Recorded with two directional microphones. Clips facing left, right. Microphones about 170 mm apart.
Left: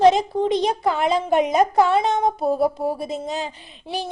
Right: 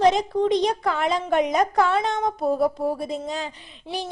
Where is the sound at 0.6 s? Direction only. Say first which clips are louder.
Left 3 dB; 25° left (ahead or behind).